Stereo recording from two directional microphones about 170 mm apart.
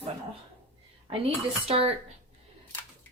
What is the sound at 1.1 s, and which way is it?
Speech, 35° right (ahead or behind).